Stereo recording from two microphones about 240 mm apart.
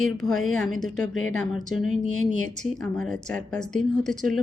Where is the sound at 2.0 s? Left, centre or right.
Left.